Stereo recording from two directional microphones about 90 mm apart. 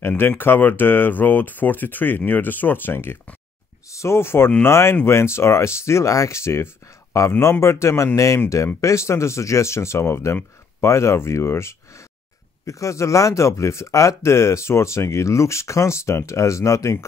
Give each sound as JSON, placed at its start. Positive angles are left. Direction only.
{"t": 0.2, "sound": "speech", "side_deg": 20}